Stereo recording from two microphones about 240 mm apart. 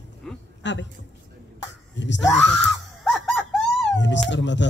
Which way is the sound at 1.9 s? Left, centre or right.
Left.